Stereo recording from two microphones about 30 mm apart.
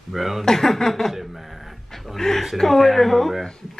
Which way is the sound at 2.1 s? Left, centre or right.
Centre.